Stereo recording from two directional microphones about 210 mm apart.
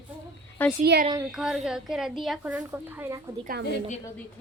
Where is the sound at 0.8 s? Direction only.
50° right (ahead or behind).